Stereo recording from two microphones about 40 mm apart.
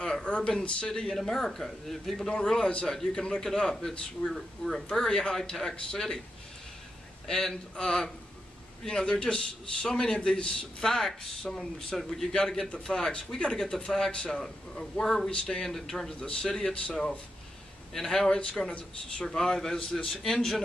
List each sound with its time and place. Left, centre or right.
0.0 s a sound: left
0.5 s a man's voice: left
1.1 s a man's voice: centre
2.2 s a man's voice: centre
4.2 s speech: left
4.6 s a man's voice: centre
7.2 s a man's voice: centre
10.8 s a man's voice: centre
17.9 s a man's voice: centre